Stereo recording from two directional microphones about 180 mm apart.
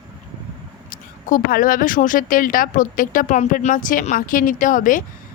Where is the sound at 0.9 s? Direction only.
50° left (ahead or behind).